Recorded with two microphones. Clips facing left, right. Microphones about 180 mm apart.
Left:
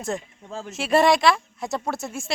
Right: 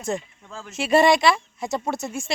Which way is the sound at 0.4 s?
25° left (ahead or behind).